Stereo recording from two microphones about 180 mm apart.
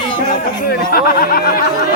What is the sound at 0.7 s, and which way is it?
Speech, 55° left (ahead or behind).